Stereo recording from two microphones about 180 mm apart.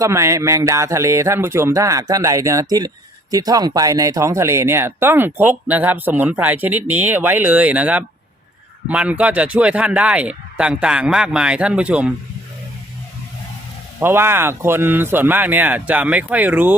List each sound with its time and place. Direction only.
0.0 s speech: 15° right (ahead or behind)
14.0 s speech: 10° right (ahead or behind)